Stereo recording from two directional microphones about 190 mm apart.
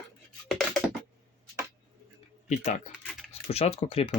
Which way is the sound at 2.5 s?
35° left (ahead or behind).